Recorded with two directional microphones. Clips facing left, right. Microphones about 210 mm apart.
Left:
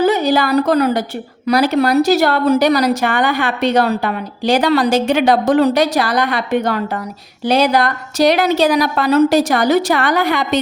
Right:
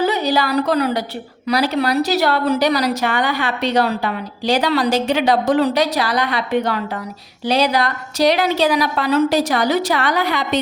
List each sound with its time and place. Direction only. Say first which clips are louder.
0.0 s a woman's voice: left 4 dB; 50° left (ahead or behind)